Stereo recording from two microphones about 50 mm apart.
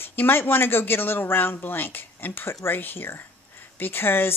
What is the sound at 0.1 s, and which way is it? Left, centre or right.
Speech, left.